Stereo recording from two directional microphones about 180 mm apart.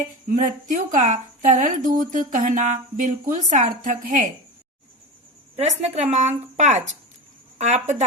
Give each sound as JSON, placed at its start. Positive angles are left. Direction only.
{"t": 0.0, "sound": "a woman's voice", "side_deg": -45}
{"t": 5.8, "sound": "a woman's voice", "side_deg": -40}